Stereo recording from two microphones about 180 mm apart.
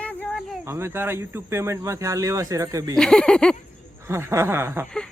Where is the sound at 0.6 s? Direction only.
15° right (ahead or behind).